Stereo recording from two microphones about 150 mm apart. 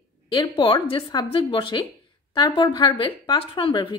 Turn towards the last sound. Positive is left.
turn(degrees=35)  # may be behind; listen again after turning